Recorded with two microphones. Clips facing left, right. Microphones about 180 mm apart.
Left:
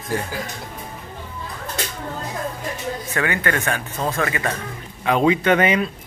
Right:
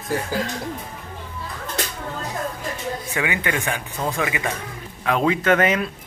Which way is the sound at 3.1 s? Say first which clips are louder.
Left 2 dB; 15° right (ahead or behind).